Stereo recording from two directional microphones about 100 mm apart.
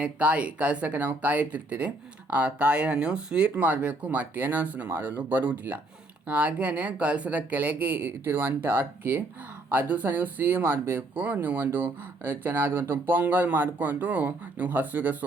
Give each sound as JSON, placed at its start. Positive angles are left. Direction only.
{"t": 0.0, "sound": "speech", "side_deg": -15}